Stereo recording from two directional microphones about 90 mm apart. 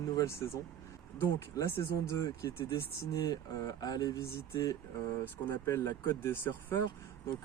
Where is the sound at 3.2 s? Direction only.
45° left (ahead or behind).